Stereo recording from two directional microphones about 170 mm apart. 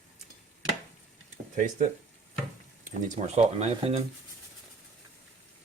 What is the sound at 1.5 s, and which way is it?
Speech, 50° right (ahead or behind).